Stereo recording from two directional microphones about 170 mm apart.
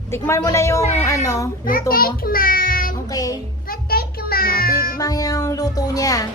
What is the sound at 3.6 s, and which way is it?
Music, 60° left (ahead or behind).